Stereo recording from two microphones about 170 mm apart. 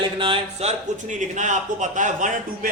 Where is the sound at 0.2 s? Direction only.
35° right (ahead or behind).